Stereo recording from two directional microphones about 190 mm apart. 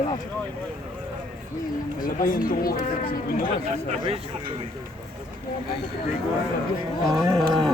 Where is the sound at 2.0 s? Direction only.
45° left (ahead or behind).